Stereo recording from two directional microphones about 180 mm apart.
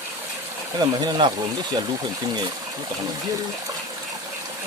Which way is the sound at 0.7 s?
25° right (ahead or behind).